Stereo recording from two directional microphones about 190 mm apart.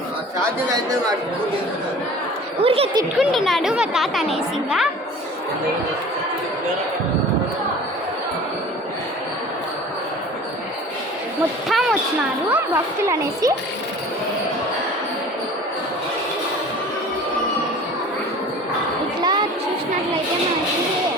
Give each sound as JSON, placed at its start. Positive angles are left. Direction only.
{"t": 0.3, "sound": "speech", "side_deg": -20}
{"t": 2.6, "sound": "a woman's voice", "side_deg": -30}
{"t": 3.2, "sound": "speech", "side_deg": 0}
{"t": 11.7, "sound": "speech", "side_deg": 0}
{"t": 12.5, "sound": "a woman's voice", "side_deg": -10}
{"t": 19.2, "sound": "a sound", "side_deg": -25}